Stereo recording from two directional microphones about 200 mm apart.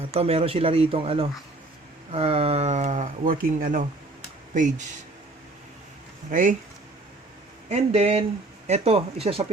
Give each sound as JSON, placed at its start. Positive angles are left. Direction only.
{"t": 0.1, "sound": "speech", "side_deg": -30}
{"t": 6.3, "sound": "speech", "side_deg": -40}
{"t": 7.7, "sound": "speech", "side_deg": -30}